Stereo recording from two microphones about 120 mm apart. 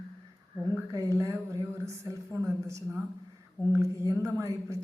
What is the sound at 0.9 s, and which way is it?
A woman's voice, 25° right (ahead or behind).